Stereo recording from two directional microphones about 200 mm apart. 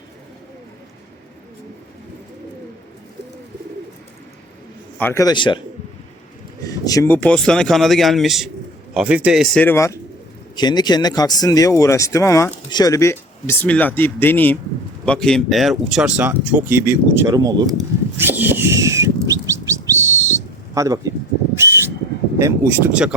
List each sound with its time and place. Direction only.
4.9 s speech: 10° left (ahead or behind)
6.7 s speech: 15° left (ahead or behind); by 17.7 s 20° right (ahead or behind)
18.2 s bird: 10° right (ahead or behind)
21.5 s a sound: 15° right (ahead or behind)
22.4 s speech: 15° right (ahead or behind)